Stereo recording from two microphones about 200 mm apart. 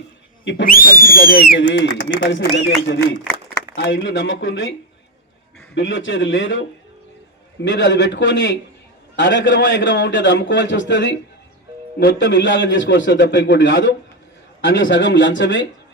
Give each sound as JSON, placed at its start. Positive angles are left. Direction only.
{"t": 0.4, "sound": "a man's voice", "side_deg": 50}
{"t": 5.7, "sound": "a man's voice", "side_deg": 65}